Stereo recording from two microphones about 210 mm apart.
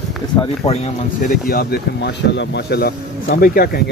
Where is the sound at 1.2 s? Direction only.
45° left (ahead or behind).